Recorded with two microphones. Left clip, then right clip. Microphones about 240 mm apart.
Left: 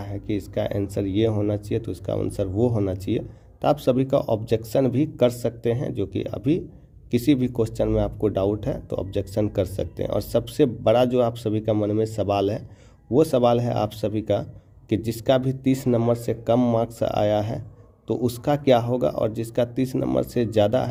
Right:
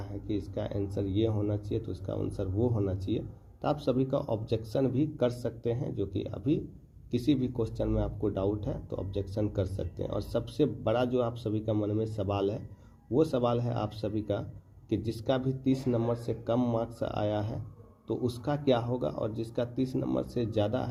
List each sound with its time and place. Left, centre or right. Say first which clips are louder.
0.0 s speech: left 7 dB; left